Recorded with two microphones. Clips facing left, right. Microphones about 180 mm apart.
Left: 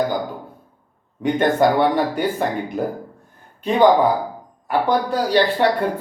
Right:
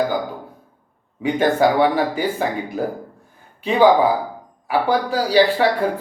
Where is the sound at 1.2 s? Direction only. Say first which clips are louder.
Even; 5° right (ahead or behind).